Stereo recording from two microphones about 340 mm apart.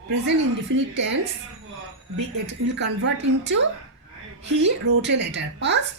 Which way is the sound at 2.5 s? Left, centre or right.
Right.